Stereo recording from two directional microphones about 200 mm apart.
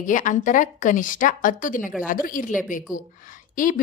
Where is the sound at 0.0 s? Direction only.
40° left (ahead or behind).